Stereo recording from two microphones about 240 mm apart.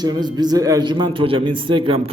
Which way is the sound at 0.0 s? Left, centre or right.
Centre.